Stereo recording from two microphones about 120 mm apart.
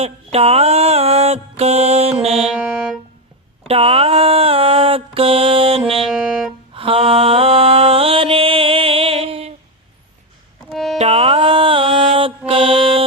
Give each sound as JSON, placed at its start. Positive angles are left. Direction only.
{"t": 0.0, "sound": "mantra", "side_deg": -60}
{"t": 2.4, "sound": "music", "side_deg": -5}
{"t": 3.7, "sound": "mantra", "side_deg": -55}
{"t": 6.1, "sound": "music", "side_deg": -5}
{"t": 6.7, "sound": "mantra", "side_deg": -50}
{"t": 10.7, "sound": "music", "side_deg": 0}
{"t": 10.9, "sound": "music", "side_deg": -60}